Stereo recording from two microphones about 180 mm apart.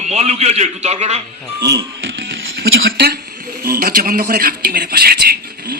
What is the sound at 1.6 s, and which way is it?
Music, 80° right.